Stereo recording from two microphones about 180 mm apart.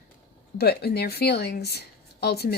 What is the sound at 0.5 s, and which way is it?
A woman's voice, 60° left (ahead or behind).